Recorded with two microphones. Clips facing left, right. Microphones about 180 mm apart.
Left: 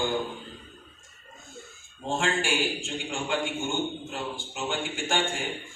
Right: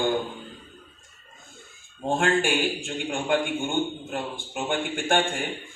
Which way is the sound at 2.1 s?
55° right (ahead or behind).